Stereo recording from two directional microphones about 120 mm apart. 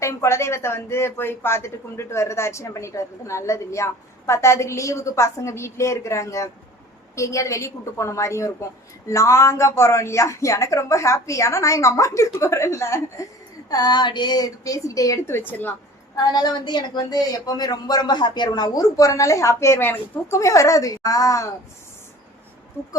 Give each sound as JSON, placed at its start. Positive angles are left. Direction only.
{"t": 0.0, "sound": "a woman's voice", "side_deg": 25}
{"t": 16.1, "sound": "a woman's voice", "side_deg": 35}